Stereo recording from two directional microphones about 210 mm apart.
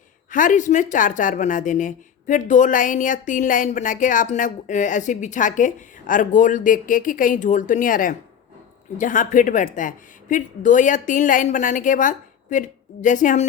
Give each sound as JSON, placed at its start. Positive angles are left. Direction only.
{"t": 0.3, "sound": "speech", "side_deg": 40}